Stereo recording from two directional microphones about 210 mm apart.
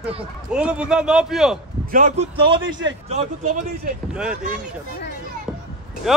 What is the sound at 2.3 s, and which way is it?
Speech, 20° right (ahead or behind).